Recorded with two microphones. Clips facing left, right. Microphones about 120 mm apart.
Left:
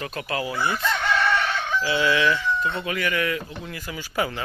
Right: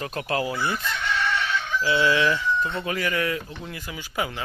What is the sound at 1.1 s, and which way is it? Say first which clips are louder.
Chicken: left 1 dB; 60° left (ahead or behind).